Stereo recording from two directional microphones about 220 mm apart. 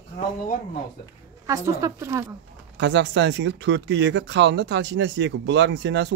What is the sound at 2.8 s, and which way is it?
Speech, 55° right (ahead or behind).